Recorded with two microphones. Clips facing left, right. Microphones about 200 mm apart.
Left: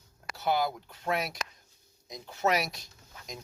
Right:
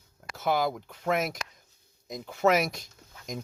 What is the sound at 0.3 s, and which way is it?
Speech, 50° right (ahead or behind).